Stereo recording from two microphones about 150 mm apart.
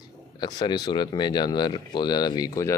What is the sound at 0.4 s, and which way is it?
Speech, 30° left (ahead or behind).